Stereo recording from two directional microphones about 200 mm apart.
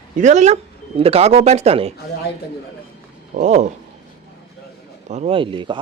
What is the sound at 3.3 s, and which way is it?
Speech, 35° right (ahead or behind).